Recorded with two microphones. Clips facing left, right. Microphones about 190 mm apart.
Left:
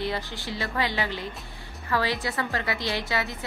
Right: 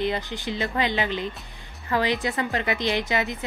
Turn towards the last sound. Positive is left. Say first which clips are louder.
# right 4 dB
turn(degrees=-20)  # may be behind; listen again after turning